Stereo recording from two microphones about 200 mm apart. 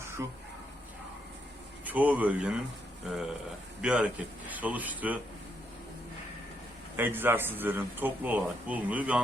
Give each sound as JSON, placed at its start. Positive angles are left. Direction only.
{"t": 0.2, "sound": "speech", "side_deg": -15}
{"t": 1.8, "sound": "speech", "side_deg": -10}
{"t": 3.8, "sound": "speech", "side_deg": -5}
{"t": 6.9, "sound": "speech", "side_deg": -10}